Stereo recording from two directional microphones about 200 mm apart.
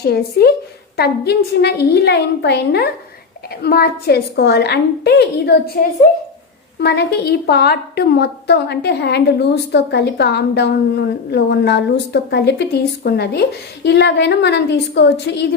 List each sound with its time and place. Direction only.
0.0 s a woman's voice: 50° left (ahead or behind)
6.8 s a woman's voice: 55° left (ahead or behind)